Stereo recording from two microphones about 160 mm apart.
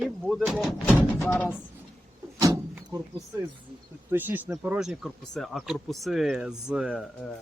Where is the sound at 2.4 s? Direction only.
20° right (ahead or behind).